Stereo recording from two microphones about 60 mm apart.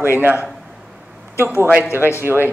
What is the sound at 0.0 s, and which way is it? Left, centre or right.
A man's voice, right.